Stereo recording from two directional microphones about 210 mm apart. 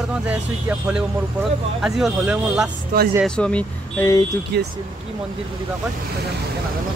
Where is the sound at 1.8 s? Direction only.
Centre (ahead or behind).